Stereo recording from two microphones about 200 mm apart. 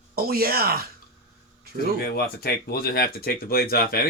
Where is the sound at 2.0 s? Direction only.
50° left (ahead or behind).